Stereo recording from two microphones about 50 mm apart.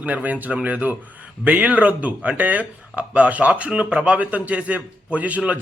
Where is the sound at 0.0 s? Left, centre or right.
Right.